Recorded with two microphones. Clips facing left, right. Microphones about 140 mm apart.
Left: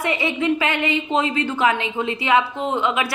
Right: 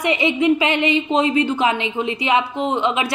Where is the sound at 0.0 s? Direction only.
20° right (ahead or behind).